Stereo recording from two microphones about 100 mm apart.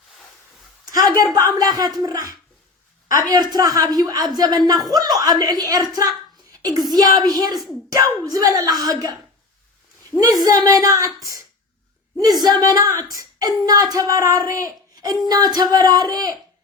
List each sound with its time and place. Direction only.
0.9 s a woman's voice: 40° right (ahead or behind)
10.4 s speech: 40° right (ahead or behind)
12.4 s speech: 45° right (ahead or behind)